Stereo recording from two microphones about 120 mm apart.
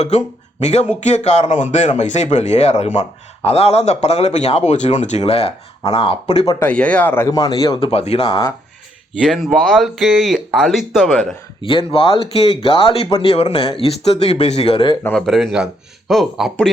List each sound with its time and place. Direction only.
0.6 s speech: 65° left (ahead or behind)
6.6 s speech: 10° left (ahead or behind)
7.3 s a man's voice: 35° left (ahead or behind)
7.8 s speech: 55° left (ahead or behind)
9.2 s speech: centre (ahead or behind)
11.6 s speech: 50° left (ahead or behind)
15.1 s speech: 5° left (ahead or behind)